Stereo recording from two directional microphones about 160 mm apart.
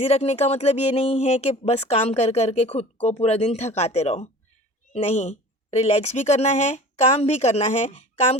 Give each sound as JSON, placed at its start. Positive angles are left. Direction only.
{"t": 0.0, "sound": "speech", "side_deg": 40}